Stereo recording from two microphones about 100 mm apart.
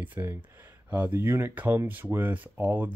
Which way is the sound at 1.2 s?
25° right (ahead or behind).